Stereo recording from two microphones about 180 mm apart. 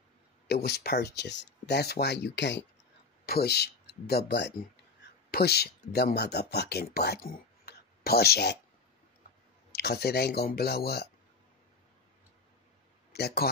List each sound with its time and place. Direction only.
0.5 s speech: 60° left (ahead or behind); by 2.6 s 75° left (ahead or behind)
3.3 s speech: 65° left (ahead or behind)
9.7 s speech: 65° left (ahead or behind)
13.1 s speech: 60° left (ahead or behind)